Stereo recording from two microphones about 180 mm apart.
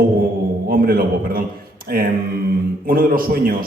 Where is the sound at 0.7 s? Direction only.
55° right (ahead or behind).